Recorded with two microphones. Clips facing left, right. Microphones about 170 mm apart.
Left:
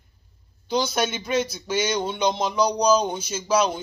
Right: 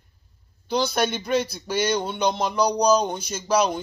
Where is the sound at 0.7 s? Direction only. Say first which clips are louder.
Right 1 dB; 5° left (ahead or behind).